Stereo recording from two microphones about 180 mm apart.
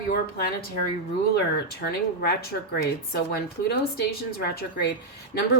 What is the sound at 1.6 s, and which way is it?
A woman's voice, 60° left (ahead or behind).